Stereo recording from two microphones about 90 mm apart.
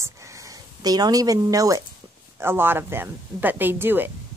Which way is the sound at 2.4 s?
25° right (ahead or behind).